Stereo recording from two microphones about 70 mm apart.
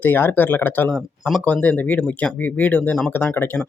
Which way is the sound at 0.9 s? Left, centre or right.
Centre.